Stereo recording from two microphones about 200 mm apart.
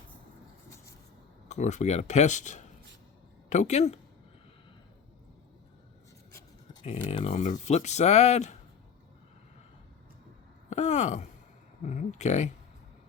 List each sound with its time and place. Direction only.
1.5 s speech: 35° left (ahead or behind)
6.8 s speech: 30° left (ahead or behind)
10.7 s a sound: 35° left (ahead or behind)
11.9 s speech: 35° left (ahead or behind)